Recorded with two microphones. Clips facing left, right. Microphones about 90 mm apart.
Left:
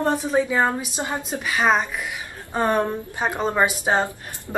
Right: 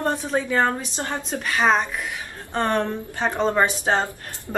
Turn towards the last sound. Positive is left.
turn(degrees=15)  # may be behind; listen again after turning